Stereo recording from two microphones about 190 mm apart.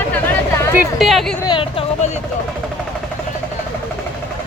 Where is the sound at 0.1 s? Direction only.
10° left (ahead or behind).